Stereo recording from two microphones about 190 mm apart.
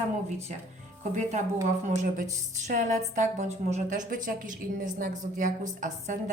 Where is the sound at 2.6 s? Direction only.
40° right (ahead or behind).